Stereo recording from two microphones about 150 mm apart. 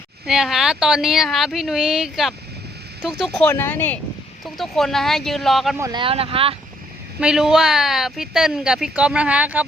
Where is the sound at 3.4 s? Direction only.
15° left (ahead or behind).